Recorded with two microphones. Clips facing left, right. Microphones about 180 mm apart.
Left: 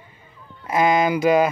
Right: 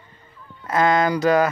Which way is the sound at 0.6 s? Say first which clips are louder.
Even; 10° left (ahead or behind).